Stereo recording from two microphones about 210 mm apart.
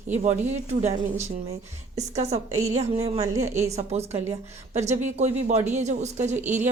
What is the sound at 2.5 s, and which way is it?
Speech, 85° right.